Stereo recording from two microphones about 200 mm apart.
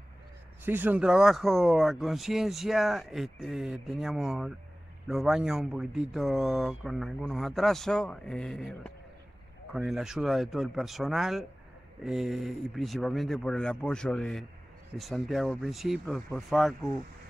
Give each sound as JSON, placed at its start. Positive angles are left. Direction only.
{"t": 0.7, "sound": "speech", "side_deg": -10}